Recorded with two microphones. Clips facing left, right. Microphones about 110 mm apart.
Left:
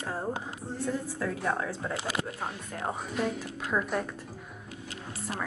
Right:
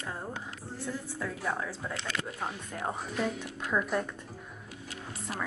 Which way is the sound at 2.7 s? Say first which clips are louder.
Left 1 dB; 5° left (ahead or behind).